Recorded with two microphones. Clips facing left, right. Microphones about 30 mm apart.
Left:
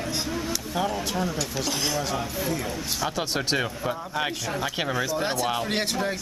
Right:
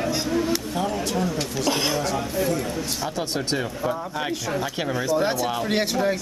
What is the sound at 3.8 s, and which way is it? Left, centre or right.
Speech, centre.